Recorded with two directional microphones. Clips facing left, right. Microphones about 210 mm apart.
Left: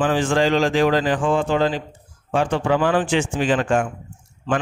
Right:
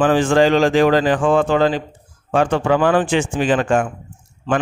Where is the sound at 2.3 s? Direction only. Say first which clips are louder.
Right 3 dB; 55° right (ahead or behind).